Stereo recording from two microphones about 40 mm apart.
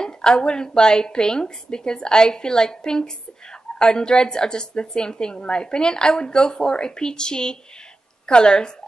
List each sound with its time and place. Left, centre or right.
0.0 s a woman's voice: centre